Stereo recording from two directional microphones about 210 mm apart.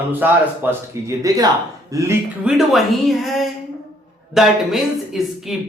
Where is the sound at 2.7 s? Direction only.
Centre (ahead or behind).